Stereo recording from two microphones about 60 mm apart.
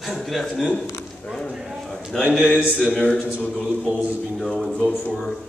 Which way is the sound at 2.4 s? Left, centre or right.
Centre.